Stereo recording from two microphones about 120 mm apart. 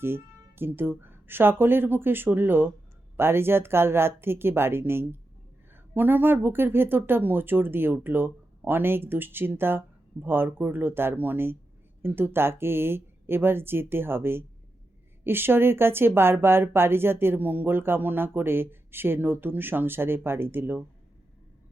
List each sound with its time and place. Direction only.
0.0 s speech: 20° right (ahead or behind)